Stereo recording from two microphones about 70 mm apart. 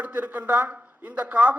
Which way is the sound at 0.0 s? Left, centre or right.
Right.